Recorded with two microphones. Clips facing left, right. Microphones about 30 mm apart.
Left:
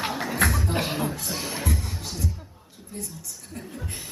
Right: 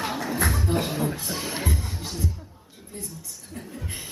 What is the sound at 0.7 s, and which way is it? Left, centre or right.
Speech, left.